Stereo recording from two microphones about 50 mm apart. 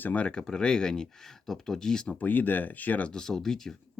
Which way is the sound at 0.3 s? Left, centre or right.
Centre.